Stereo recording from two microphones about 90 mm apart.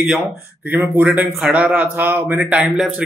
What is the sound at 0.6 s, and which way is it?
Speech, 20° right (ahead or behind).